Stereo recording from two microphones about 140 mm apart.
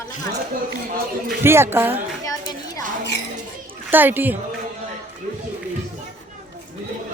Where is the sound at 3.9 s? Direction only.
15° right (ahead or behind).